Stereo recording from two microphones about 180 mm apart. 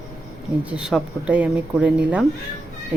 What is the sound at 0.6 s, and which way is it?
Speech, 5° right (ahead or behind).